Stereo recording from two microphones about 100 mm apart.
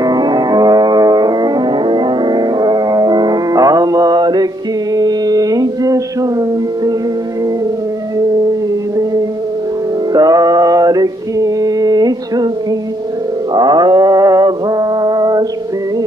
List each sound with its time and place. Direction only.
0.0 s music: 45° right (ahead or behind)
4.9 s mantra: 40° right (ahead or behind)
10.1 s male singing: 40° right (ahead or behind)
13.6 s mantra: 45° right (ahead or behind)